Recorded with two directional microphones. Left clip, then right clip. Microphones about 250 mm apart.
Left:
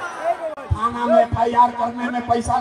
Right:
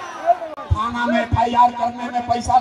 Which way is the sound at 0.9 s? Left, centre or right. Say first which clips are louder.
Left 3 dB; right.